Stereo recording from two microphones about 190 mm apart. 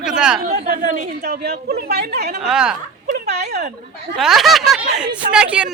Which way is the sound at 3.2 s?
60° right (ahead or behind).